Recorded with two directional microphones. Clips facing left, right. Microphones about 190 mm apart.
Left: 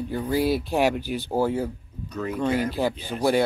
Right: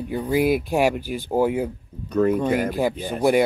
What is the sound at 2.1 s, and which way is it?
Speech, 55° right (ahead or behind).